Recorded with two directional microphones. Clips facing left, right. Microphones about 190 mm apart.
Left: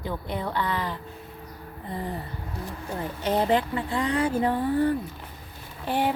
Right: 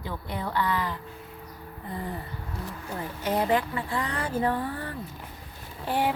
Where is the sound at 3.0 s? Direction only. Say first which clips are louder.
Left 2 dB; 25° left (ahead or behind).